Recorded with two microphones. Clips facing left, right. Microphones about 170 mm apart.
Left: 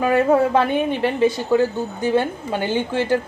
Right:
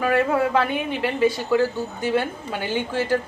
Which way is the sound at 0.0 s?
25° left (ahead or behind).